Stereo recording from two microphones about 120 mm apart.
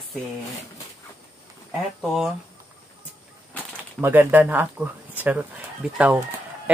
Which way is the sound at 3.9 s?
15° right (ahead or behind).